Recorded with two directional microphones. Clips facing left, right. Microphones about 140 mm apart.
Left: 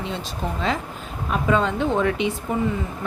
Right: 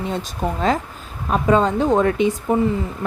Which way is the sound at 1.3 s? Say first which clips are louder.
Right 4 dB; 40° right (ahead or behind).